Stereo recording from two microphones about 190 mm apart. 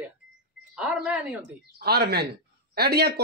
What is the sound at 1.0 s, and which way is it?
Speech, 10° right (ahead or behind).